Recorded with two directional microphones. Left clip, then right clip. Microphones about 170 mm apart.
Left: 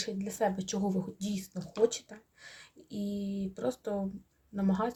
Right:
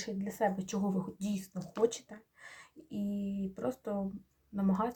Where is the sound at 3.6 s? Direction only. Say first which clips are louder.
Left 3 dB; 20° left (ahead or behind).